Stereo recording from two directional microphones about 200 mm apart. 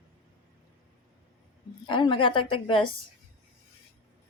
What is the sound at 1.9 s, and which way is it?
A woman's voice, 25° left (ahead or behind).